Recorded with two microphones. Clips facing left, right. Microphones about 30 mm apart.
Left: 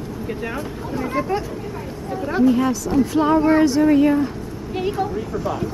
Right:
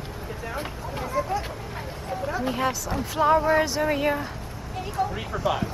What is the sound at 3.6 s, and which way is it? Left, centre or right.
Speech, centre.